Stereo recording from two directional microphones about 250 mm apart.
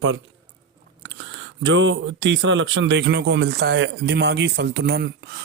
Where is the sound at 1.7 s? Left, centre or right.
Right.